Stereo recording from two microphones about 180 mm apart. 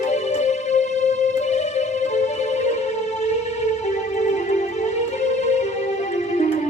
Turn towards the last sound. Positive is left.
turn(degrees=40)  # may be behind; listen again after turning